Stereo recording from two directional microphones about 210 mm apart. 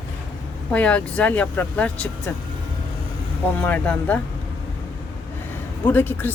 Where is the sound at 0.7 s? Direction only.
5° left (ahead or behind).